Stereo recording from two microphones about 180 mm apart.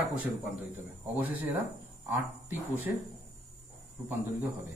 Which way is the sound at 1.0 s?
10° right (ahead or behind).